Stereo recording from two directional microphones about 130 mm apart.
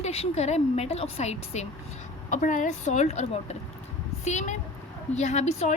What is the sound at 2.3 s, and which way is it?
A woman's voice, 80° left.